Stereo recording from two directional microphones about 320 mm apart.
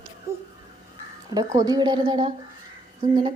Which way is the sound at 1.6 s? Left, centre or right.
Centre.